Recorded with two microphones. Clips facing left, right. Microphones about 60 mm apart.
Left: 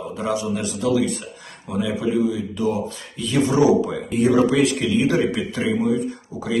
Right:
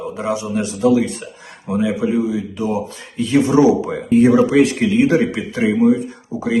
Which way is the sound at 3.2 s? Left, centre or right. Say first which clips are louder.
Right 5 dB; right.